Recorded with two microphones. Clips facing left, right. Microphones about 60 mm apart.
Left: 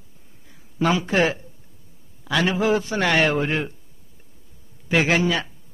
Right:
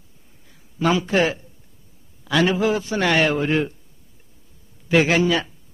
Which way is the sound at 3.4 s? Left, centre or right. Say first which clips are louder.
Right 4 dB; centre.